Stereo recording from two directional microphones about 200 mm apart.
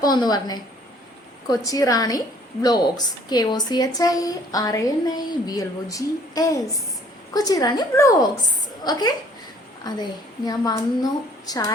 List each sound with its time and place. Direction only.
0.0 s a woman's voice: 20° left (ahead or behind)
10.4 s a woman's voice: 20° left (ahead or behind)